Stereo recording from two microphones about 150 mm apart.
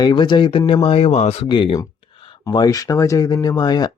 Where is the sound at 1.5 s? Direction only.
30° left (ahead or behind).